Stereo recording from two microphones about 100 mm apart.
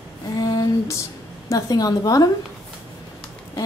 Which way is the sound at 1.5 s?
35° left (ahead or behind).